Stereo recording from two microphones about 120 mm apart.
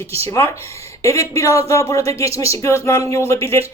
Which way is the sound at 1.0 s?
25° left (ahead or behind).